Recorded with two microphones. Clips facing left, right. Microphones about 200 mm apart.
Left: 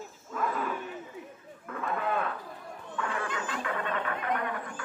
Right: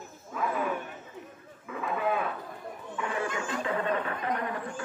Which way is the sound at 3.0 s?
15° right (ahead or behind).